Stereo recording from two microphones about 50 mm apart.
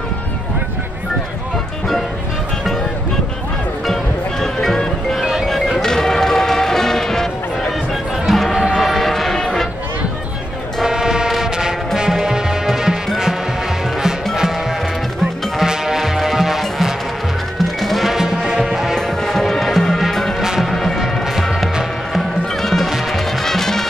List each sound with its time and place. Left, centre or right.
3.8 s music: centre
8.7 s train: centre
9.4 s music: centre
10.8 s train: centre
11.5 s music: centre
15.5 s music: centre
18.1 s music: centre
18.9 s music: centre
23.4 s music: centre